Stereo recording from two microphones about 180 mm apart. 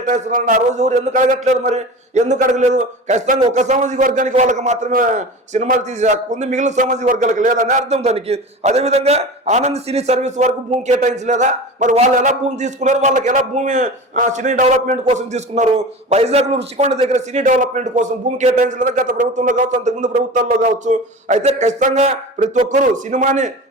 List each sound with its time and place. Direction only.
0.1 s a man's voice: 45° right (ahead or behind)